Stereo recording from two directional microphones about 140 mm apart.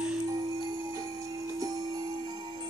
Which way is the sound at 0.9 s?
25° right (ahead or behind).